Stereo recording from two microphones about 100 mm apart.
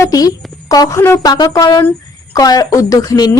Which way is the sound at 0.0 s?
35° left (ahead or behind).